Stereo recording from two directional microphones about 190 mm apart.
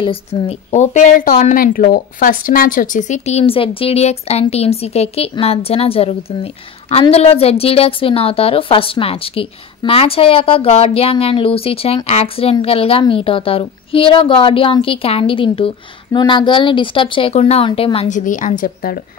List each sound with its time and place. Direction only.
0.0 s a woman's voice: 30° left (ahead or behind); by 18.9 s 50° left (ahead or behind)